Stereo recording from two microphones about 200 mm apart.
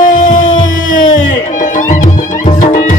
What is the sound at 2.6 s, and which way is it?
Music, 40° left (ahead or behind).